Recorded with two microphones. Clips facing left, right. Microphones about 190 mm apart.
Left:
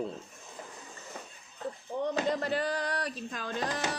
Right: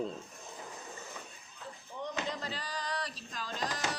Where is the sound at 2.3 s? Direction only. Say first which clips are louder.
Left 10 dB; 55° left (ahead or behind).